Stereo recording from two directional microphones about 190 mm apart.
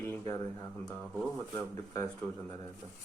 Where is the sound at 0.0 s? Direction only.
10° left (ahead or behind).